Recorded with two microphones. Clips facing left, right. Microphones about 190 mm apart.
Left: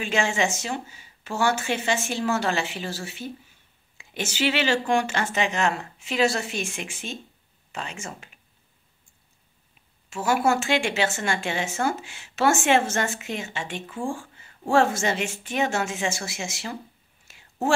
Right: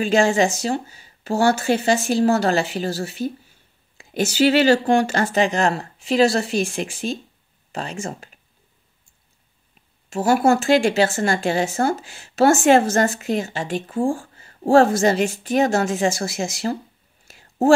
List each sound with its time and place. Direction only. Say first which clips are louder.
0.0 s a woman's voice: right 8 dB; 35° right (ahead or behind)
10.0 s a woman's voice: right 6 dB; 40° right (ahead or behind)
17.3 s whispering: right 9 dB; 40° right (ahead or behind)